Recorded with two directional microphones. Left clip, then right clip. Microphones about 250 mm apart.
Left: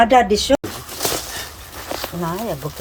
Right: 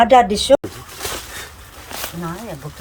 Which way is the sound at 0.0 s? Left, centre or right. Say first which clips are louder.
Right 1 dB; right.